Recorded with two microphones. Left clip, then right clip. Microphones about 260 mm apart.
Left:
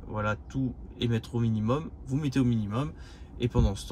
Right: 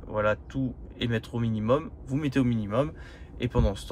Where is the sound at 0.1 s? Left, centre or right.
Left.